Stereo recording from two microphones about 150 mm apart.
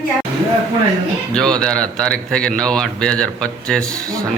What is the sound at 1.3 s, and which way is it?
A man's voice, 5° left (ahead or behind).